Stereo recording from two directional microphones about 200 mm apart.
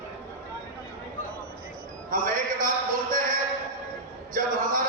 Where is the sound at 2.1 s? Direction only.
45° right (ahead or behind).